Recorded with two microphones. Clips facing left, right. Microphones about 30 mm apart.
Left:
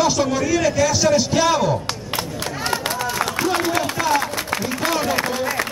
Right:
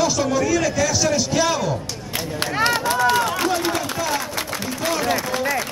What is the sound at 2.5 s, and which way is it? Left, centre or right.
Run, right.